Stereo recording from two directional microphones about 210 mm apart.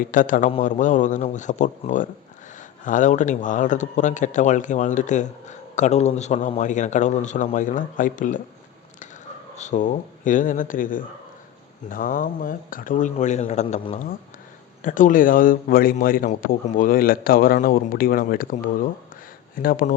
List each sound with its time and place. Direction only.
0.1 s speech: 40° left (ahead or behind)
9.6 s a man's voice: 35° left (ahead or behind)